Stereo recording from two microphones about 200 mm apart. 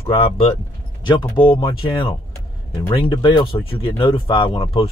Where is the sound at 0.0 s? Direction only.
30° left (ahead or behind).